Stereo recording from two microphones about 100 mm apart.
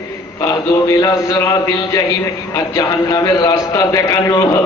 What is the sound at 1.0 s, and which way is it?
Speech, 30° left (ahead or behind).